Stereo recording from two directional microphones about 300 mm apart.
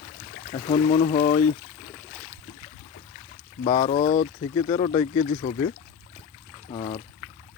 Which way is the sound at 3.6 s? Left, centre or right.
Left.